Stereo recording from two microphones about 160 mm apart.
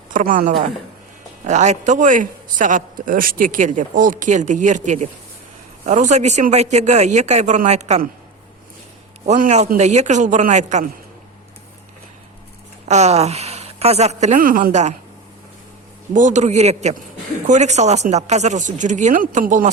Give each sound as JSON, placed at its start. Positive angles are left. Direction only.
{"t": 0.1, "sound": "a woman's voice", "side_deg": -55}
{"t": 9.2, "sound": "a man's voice", "side_deg": -45}
{"t": 12.9, "sound": "a man's voice", "side_deg": -45}
{"t": 16.1, "sound": "a man's voice", "side_deg": -50}